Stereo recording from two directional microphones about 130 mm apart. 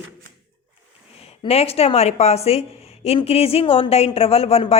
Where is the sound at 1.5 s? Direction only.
50° left (ahead or behind).